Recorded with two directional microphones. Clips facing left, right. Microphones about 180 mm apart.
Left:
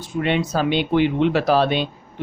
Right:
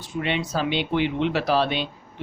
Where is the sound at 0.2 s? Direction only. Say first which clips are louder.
Left 5 dB; 50° left (ahead or behind).